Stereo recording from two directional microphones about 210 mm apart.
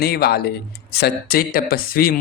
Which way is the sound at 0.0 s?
45° left (ahead or behind).